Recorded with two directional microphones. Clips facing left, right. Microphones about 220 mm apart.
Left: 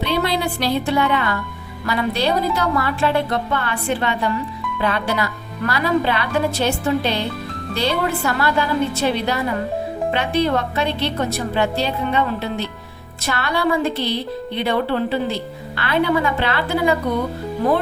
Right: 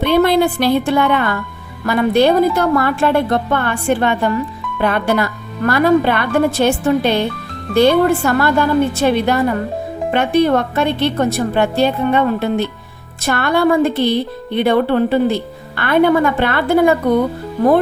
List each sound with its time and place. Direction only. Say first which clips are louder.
0.0 s a woman's voice: right 8 dB; 55° right (ahead or behind)